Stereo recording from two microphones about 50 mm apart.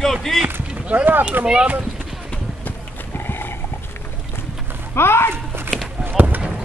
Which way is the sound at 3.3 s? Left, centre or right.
Left.